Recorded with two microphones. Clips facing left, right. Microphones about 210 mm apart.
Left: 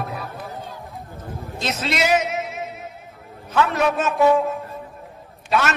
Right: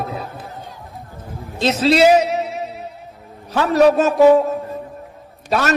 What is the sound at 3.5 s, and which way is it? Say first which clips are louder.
A man's voice: right 7 dB; 35° right (ahead or behind).